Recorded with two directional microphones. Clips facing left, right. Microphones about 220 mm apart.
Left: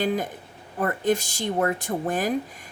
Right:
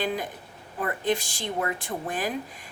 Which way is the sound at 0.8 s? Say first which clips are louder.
Left 4 dB; 45° left (ahead or behind).